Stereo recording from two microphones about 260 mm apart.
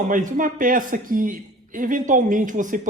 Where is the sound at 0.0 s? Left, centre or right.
Right.